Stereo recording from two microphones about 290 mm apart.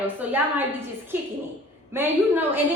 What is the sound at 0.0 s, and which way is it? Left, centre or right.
A woman's voice, centre.